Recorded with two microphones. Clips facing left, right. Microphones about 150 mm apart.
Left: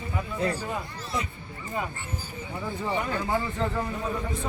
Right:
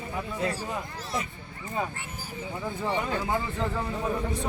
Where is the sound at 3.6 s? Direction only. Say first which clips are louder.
Left 1 dB; 5° right (ahead or behind).